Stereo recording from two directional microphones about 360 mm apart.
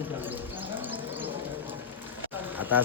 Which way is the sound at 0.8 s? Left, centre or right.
Centre.